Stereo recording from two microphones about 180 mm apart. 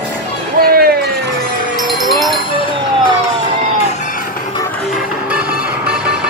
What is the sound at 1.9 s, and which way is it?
Music, centre (ahead or behind).